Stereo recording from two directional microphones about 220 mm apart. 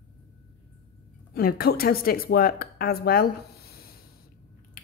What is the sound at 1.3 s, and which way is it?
Speech, 45° left (ahead or behind).